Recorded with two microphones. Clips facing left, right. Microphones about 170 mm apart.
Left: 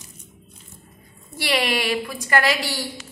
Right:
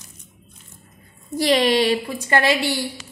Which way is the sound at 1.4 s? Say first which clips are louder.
Right 6 dB; 35° right (ahead or behind).